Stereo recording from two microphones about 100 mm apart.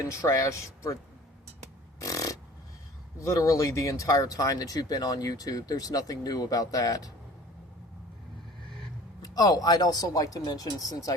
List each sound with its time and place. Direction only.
0.1 s speech: 30° left (ahead or behind)
2.0 s a sound: 35° left (ahead or behind)
3.2 s speech: 30° left (ahead or behind)
9.2 s speech: 40° left (ahead or behind)